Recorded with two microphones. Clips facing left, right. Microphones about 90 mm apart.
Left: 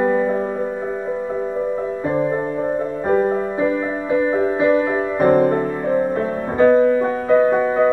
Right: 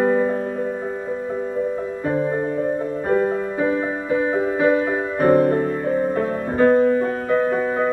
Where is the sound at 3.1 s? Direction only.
15° left (ahead or behind).